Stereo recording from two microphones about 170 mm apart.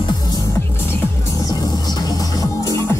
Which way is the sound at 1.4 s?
25° left (ahead or behind).